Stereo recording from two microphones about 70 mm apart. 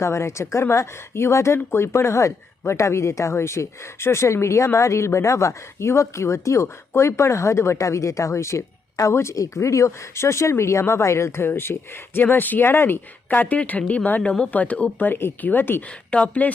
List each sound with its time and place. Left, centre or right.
0.0 s speech: left
16.1 s speech: centre